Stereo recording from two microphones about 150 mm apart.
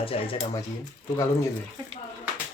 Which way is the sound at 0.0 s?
40° left (ahead or behind).